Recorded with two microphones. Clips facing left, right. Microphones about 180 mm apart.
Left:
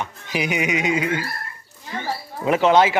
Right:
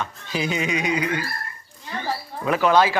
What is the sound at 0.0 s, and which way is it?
Speech, 15° left (ahead or behind).